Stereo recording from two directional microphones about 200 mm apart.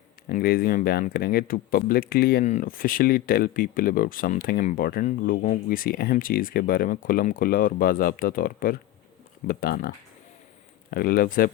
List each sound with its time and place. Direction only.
0.3 s speech: 50° left (ahead or behind)
10.9 s speech: 50° left (ahead or behind)